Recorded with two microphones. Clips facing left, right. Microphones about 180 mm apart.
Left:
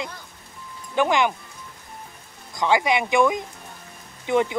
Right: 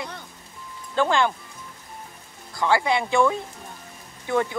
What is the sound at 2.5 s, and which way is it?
Speech, 20° left (ahead or behind).